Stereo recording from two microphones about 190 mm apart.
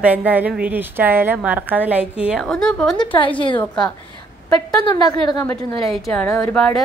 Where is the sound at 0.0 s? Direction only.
10° right (ahead or behind).